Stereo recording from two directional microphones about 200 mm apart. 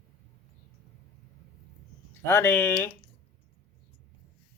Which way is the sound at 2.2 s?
10° left (ahead or behind).